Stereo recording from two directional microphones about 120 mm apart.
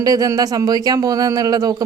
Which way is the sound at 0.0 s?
30° right (ahead or behind).